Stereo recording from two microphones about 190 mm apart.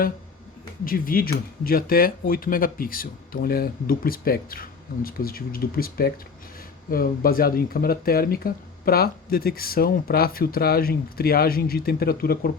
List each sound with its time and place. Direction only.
0.9 s speech: 50° left (ahead or behind)